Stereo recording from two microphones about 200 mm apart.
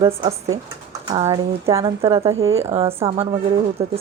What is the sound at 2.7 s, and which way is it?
Speech, 30° right (ahead or behind).